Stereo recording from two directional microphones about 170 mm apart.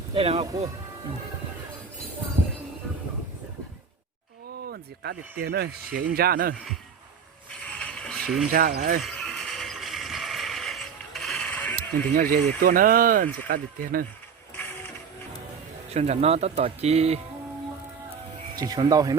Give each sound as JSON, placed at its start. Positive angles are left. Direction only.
{"t": 0.1, "sound": "speech", "side_deg": -35}
{"t": 4.6, "sound": "speech", "side_deg": -70}
{"t": 7.5, "sound": "a sound", "side_deg": 10}
{"t": 8.4, "sound": "speech", "side_deg": -60}
{"t": 9.0, "sound": "a sound", "side_deg": 0}
{"t": 12.1, "sound": "speech", "side_deg": -55}
{"t": 14.5, "sound": "printer", "side_deg": 15}
{"t": 15.9, "sound": "speech", "side_deg": -40}
{"t": 18.5, "sound": "speech", "side_deg": -25}